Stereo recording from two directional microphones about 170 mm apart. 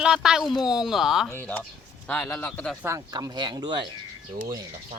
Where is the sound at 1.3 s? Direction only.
10° left (ahead or behind).